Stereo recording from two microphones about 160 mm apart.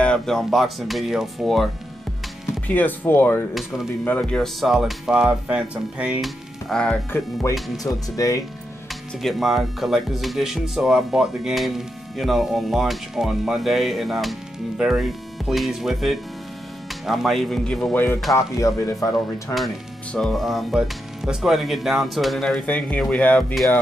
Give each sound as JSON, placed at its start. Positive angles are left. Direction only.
{"t": 0.0, "sound": "speech", "side_deg": 5}
{"t": 2.7, "sound": "speech", "side_deg": 10}
{"t": 3.5, "sound": "speech", "side_deg": 0}
{"t": 7.8, "sound": "speech", "side_deg": 20}
{"t": 9.2, "sound": "speech", "side_deg": 0}
{"t": 17.9, "sound": "speech", "side_deg": 15}
{"t": 19.5, "sound": "speech", "side_deg": 0}